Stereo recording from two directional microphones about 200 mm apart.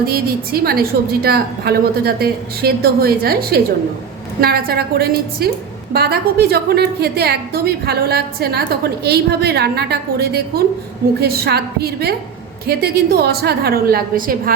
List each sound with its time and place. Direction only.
0.0 s a woman's voice: 50° right (ahead or behind)